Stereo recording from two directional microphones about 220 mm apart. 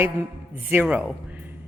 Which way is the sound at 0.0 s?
10° right (ahead or behind).